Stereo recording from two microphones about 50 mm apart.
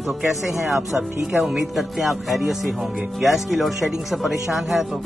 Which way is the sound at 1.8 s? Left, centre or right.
Centre.